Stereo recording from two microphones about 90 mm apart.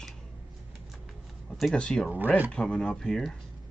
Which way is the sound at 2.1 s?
20° right (ahead or behind).